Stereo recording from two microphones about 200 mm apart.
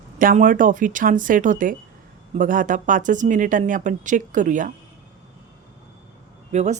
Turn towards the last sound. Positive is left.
turn(degrees=-35)  # may be behind; listen again after turning